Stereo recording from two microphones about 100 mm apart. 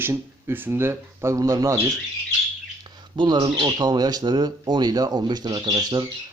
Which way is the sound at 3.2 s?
45° right (ahead or behind).